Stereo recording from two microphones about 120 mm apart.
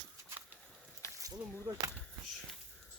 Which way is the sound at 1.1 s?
25° right (ahead or behind).